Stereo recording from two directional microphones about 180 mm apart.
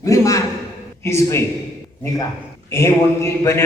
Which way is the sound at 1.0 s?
15° left (ahead or behind).